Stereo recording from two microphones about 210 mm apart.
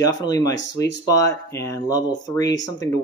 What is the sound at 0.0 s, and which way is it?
Speech, 20° left (ahead or behind).